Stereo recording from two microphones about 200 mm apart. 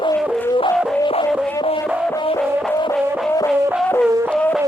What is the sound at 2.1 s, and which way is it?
Music, 20° left (ahead or behind).